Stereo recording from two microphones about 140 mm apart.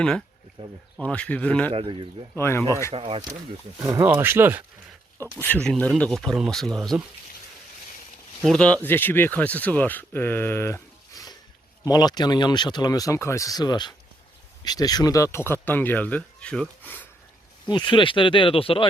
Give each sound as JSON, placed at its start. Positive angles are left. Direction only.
{"t": 0.6, "sound": "speech", "side_deg": -40}
{"t": 0.9, "sound": "speech", "side_deg": 5}
{"t": 1.7, "sound": "speech", "side_deg": -40}
{"t": 2.3, "sound": "speech", "side_deg": 15}
{"t": 2.9, "sound": "speech", "side_deg": -40}
{"t": 3.8, "sound": "speech", "side_deg": -20}
{"t": 5.4, "sound": "speech", "side_deg": 10}
{"t": 8.4, "sound": "speech", "side_deg": 5}
{"t": 17.7, "sound": "speech", "side_deg": 35}